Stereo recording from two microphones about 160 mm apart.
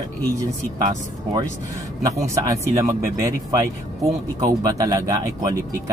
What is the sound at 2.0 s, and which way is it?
Speech, 20° right (ahead or behind).